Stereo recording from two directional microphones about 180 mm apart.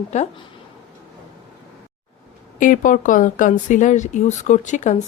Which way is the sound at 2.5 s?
45° left (ahead or behind).